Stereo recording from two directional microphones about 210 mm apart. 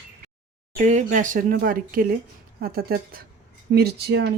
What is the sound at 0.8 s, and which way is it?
Speech, 35° right (ahead or behind).